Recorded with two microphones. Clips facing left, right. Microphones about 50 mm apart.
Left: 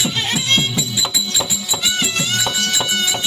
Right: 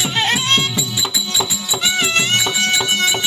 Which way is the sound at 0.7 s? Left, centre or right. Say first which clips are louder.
Even; centre.